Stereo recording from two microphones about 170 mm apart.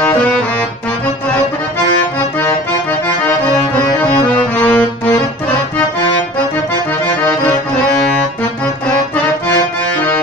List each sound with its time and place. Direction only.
4.6 s accordion: 10° left (ahead or behind)